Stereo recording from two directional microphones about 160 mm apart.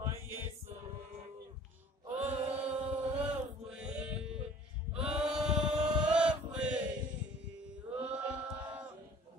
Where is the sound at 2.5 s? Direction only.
5° right (ahead or behind).